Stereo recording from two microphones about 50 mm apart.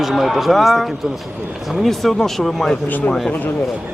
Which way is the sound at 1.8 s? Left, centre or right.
Centre.